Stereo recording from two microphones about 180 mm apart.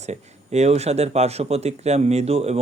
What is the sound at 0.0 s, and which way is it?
Speech, 40° right (ahead or behind).